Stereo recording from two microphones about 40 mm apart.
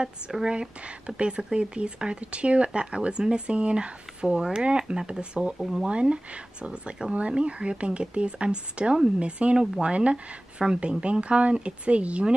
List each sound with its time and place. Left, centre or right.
0.3 s speech: centre
0.6 s speech: right
5.6 s speech: centre
5.9 s speech: right